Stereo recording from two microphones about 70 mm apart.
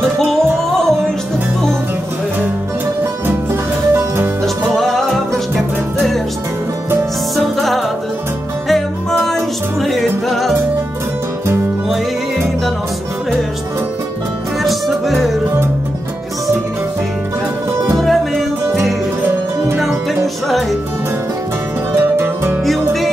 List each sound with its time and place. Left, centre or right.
0.2 s music: centre
4.7 s music: centre
7.5 s music: centre
14.6 s music: centre
17.9 s music: centre
19.2 s music: right
21.9 s music: right